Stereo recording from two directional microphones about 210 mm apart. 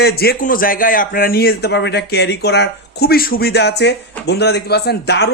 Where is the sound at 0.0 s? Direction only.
45° left (ahead or behind).